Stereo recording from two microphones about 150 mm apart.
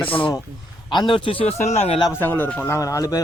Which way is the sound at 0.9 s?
30° left (ahead or behind).